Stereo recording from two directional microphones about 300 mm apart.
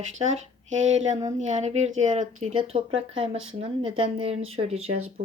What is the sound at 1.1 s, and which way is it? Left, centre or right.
Speech, right.